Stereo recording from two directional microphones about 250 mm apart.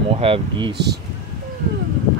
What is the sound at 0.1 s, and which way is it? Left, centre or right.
Speech, right.